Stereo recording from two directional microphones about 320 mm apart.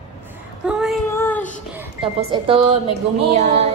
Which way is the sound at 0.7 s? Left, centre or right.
Centre.